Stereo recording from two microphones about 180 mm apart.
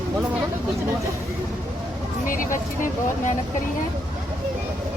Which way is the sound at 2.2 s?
45° left (ahead or behind).